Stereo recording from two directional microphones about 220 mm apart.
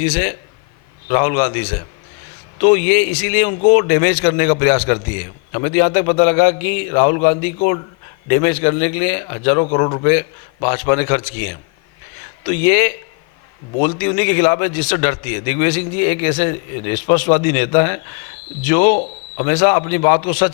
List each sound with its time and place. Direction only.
0.0 s a man's voice: 15° left (ahead or behind)